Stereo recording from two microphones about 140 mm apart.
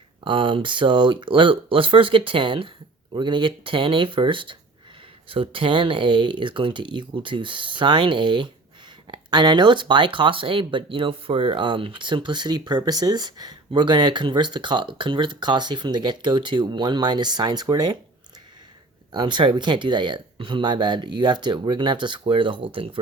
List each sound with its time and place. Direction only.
0.3 s speech: 35° right (ahead or behind)
19.1 s speech: 35° right (ahead or behind)